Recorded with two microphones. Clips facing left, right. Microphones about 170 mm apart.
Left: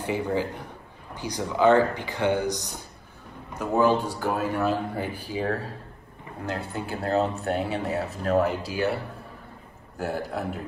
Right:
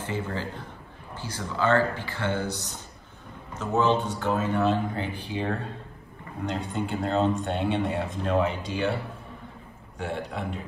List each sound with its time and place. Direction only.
0.0 s speech: 15° left (ahead or behind)
9.9 s speech: 5° left (ahead or behind)